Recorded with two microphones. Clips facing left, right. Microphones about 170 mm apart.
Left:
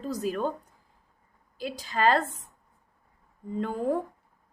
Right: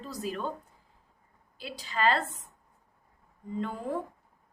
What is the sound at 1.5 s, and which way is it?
Speech, 45° left (ahead or behind).